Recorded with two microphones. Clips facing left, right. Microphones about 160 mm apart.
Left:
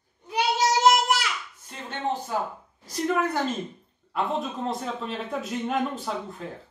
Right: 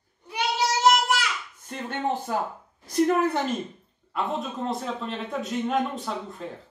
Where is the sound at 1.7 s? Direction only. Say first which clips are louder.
Right 2 dB; 50° right (ahead or behind).